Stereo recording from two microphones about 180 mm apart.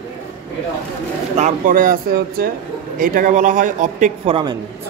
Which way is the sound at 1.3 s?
45° right (ahead or behind).